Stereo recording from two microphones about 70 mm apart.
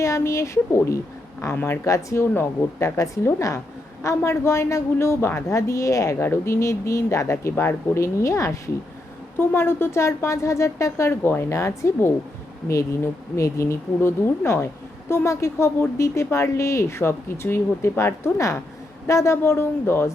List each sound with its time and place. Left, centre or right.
0.0 s a woman's voice: left
1.8 s a woman's voice: left
2.3 s a woman's voice: left
9.4 s a woman's voice: left
11.2 s a woman's voice: left
13.3 s a woman's voice: left